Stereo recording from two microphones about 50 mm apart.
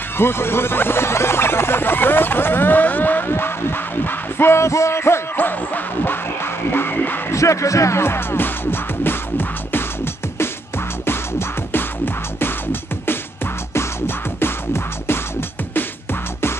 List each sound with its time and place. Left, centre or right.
0.2 s speech: left
6.0 s music: left
7.2 s speech: left
8.0 s music: left
11.1 s music: left
13.7 s music: left